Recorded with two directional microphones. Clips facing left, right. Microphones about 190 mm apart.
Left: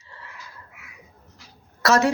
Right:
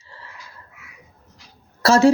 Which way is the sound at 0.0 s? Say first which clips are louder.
Right 1 dB; 30° right (ahead or behind).